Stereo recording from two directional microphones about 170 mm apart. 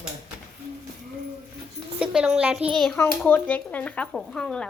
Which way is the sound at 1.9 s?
5° right (ahead or behind).